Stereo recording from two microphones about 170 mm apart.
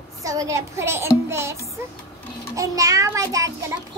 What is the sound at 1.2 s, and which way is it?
Music, 15° right (ahead or behind).